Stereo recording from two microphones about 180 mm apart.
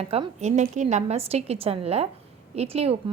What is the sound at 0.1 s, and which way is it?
A woman's voice, 35° right (ahead or behind).